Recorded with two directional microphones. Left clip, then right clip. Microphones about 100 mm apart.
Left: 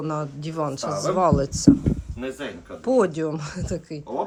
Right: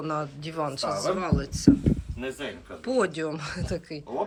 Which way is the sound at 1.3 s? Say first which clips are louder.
Left 5 dB; 65° left (ahead or behind).